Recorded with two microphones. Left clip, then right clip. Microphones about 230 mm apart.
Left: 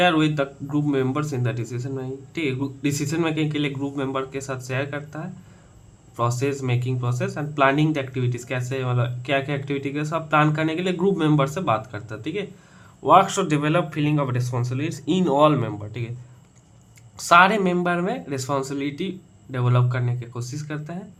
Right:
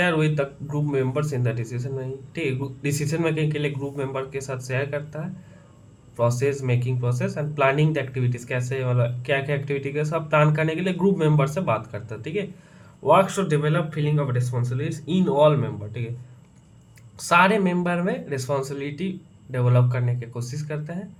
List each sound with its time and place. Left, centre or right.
0.0 s a man's voice: centre
17.2 s a man's voice: left